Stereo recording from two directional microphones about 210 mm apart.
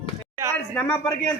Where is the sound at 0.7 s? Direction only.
10° left (ahead or behind).